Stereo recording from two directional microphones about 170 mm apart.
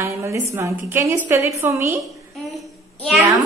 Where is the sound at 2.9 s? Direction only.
Centre (ahead or behind).